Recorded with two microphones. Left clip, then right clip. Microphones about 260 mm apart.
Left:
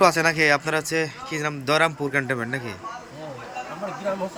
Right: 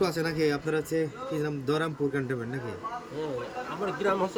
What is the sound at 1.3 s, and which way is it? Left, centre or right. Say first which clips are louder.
A man's voice: left 8 dB; left.